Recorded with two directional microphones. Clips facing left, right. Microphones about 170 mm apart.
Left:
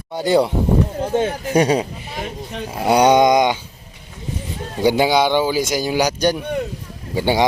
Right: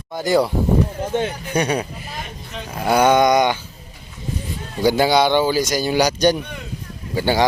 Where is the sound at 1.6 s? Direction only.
25° left (ahead or behind).